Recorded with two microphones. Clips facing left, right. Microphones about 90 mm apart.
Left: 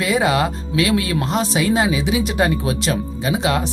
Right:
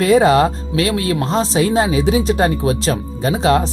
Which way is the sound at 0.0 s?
40° right (ahead or behind).